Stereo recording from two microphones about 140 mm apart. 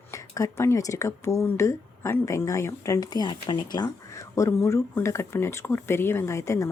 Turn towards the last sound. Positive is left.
turn(degrees=20)  # may be behind; listen again after turning